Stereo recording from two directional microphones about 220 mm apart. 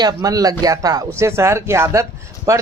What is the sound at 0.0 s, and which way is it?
Speech, 15° right (ahead or behind).